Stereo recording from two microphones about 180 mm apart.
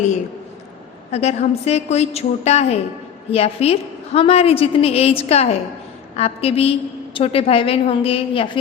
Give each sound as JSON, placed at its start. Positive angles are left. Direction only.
{"t": 1.1, "sound": "a woman's voice", "side_deg": 35}